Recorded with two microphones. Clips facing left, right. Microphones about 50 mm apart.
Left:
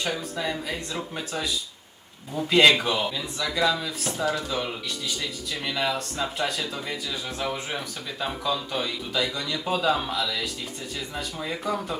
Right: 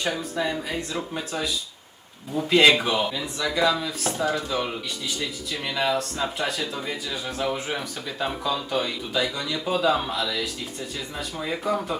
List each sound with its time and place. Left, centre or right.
0.2 s speech: centre
4.2 s speech: centre
4.4 s speech: centre